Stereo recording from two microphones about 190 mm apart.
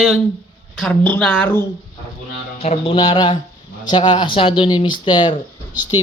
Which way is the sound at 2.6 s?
30° left (ahead or behind).